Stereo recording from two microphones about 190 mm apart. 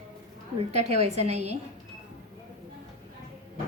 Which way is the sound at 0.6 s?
35° right (ahead or behind).